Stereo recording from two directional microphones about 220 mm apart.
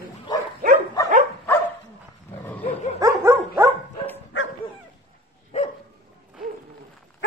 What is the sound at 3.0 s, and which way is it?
Dog, 15° right (ahead or behind).